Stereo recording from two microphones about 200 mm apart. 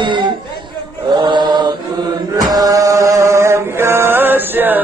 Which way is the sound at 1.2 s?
20° right (ahead or behind).